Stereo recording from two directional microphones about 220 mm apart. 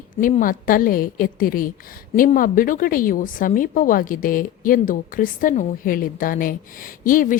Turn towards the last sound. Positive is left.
turn(degrees=40)  # may be behind; listen again after turning